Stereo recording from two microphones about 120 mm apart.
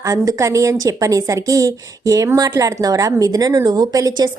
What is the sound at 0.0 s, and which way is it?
A woman's voice, 30° right (ahead or behind).